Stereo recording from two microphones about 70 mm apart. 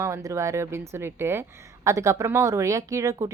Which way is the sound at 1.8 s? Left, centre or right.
Right.